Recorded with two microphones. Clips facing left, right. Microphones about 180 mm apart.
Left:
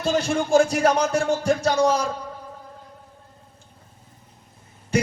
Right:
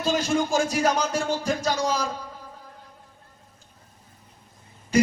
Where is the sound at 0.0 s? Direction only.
65° left (ahead or behind).